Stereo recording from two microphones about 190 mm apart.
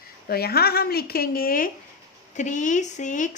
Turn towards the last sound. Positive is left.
turn(degrees=40)  # may be behind; listen again after turning